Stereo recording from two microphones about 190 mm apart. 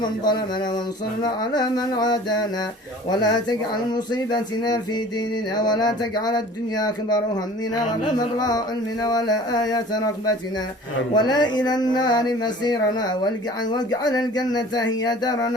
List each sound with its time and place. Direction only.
0.0 s speech: 20° left (ahead or behind)
3.2 s speech: 20° left (ahead or behind)
11.1 s speech: 20° left (ahead or behind)